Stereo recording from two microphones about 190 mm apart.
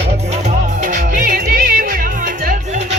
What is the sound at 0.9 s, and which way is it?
Music, 45° right (ahead or behind).